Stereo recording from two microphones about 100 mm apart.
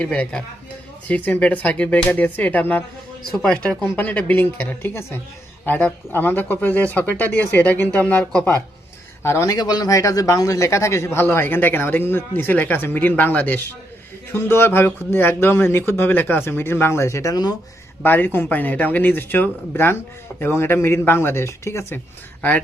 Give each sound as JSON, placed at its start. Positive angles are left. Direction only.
{"t": 0.0, "sound": "speech", "side_deg": 10}
{"t": 9.2, "sound": "speech", "side_deg": 30}
{"t": 18.0, "sound": "speech", "side_deg": 20}